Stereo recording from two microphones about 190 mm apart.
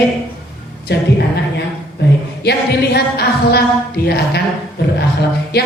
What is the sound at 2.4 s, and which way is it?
Music, 60° left (ahead or behind).